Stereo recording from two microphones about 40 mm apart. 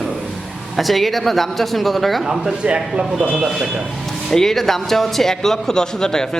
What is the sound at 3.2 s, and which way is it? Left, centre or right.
Speech, right.